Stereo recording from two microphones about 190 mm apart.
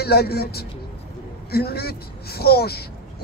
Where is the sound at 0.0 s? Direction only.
55° left (ahead or behind).